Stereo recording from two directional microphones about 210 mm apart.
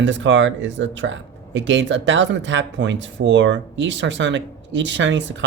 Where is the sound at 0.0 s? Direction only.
60° right (ahead or behind).